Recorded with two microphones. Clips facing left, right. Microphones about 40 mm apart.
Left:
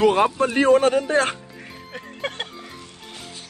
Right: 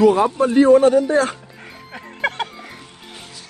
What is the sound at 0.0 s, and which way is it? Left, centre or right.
A man's voice, left.